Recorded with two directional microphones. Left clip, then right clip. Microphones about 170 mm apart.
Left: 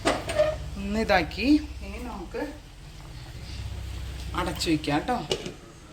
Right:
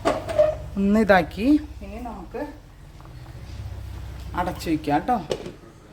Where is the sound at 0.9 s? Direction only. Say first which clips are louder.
Right 5 dB; 55° right (ahead or behind).